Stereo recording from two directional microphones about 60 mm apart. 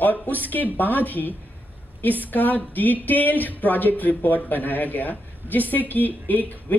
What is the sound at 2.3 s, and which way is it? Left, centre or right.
Speech, left.